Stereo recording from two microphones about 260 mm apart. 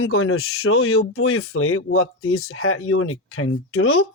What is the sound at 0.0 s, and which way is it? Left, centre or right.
Speech, left.